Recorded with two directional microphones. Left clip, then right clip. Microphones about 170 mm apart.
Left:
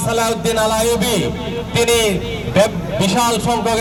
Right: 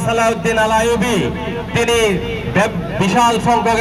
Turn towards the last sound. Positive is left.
turn(degrees=35)  # may be behind; listen again after turning